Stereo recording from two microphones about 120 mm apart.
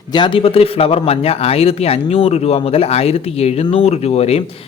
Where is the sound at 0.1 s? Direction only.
40° left (ahead or behind).